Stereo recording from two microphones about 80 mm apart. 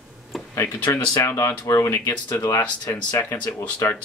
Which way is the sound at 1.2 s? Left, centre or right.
Left.